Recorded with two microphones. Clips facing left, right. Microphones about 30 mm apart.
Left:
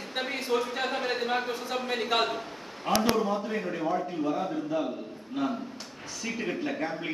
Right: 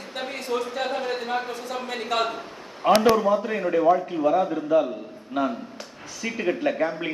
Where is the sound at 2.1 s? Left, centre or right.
Centre.